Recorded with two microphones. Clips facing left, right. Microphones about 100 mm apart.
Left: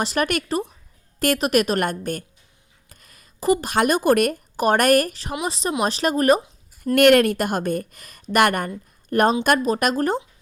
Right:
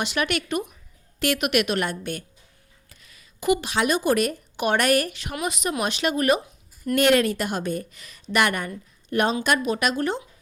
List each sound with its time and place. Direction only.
0.0 s a woman's voice: 40° left (ahead or behind)
5.3 s speech: 30° left (ahead or behind)
6.9 s a woman's voice: 55° left (ahead or behind)